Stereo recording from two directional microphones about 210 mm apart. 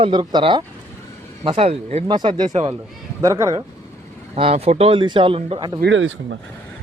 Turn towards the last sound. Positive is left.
turn(degrees=-60)  # may be behind; listen again after turning